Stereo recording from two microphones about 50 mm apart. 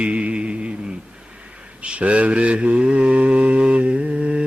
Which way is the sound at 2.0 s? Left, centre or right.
Right.